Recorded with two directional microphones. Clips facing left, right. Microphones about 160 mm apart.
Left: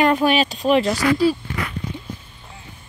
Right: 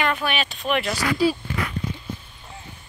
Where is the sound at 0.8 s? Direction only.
25° left (ahead or behind).